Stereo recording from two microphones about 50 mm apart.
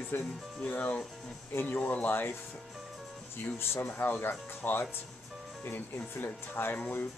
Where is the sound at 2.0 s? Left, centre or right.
Left.